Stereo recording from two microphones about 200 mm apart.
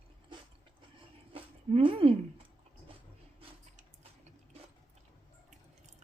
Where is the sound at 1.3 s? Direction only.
25° right (ahead or behind).